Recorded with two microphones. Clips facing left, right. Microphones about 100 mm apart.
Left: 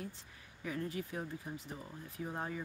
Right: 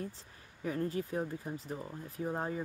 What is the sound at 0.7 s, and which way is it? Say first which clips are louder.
Speech: right 5 dB; 40° right (ahead or behind).